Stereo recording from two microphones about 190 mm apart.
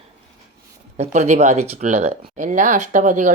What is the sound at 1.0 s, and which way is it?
Speech, 40° right (ahead or behind).